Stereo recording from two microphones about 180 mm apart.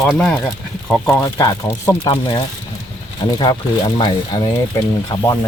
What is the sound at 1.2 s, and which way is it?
Speech, 20° left (ahead or behind).